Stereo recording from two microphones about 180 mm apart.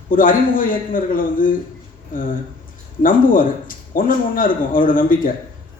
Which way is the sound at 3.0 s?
50° left (ahead or behind).